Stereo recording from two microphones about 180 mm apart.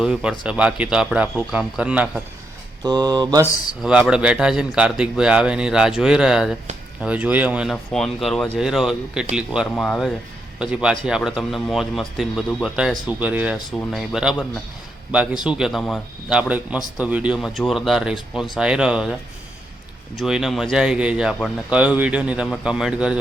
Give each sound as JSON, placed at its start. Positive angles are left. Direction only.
{"t": 0.0, "sound": "speech", "side_deg": -5}
{"t": 2.8, "sound": "mantra", "side_deg": -20}
{"t": 3.8, "sound": "speech", "side_deg": -5}
{"t": 20.1, "sound": "speech", "side_deg": -5}